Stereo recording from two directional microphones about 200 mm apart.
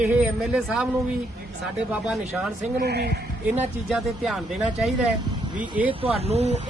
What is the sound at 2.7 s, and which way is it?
Speech, 55° right (ahead or behind).